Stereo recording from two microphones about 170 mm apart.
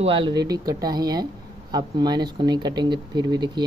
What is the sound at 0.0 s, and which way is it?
Speech, 30° right (ahead or behind).